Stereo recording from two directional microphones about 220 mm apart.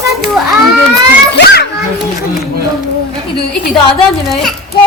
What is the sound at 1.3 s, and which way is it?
Speech, 50° left (ahead or behind).